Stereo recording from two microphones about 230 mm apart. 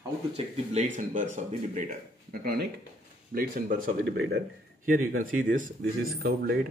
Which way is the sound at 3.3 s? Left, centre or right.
Right.